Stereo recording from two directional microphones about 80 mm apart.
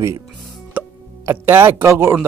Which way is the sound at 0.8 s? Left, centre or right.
Right.